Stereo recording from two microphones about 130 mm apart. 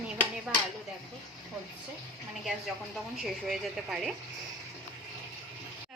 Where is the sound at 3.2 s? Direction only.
Centre (ahead or behind).